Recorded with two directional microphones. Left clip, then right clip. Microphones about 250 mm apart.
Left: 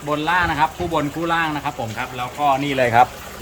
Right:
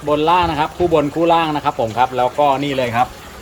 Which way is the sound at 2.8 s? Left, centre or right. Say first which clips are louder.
Left 5 dB; left.